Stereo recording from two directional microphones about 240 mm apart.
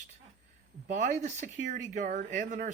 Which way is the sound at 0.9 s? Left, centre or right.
Right.